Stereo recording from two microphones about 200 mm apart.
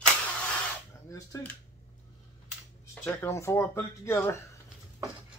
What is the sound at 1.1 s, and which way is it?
Speech, 15° left (ahead or behind).